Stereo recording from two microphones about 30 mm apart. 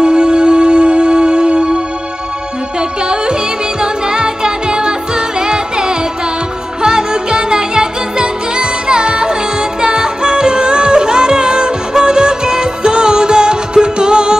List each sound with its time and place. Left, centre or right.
0.0 s music: right
3.8 s music: right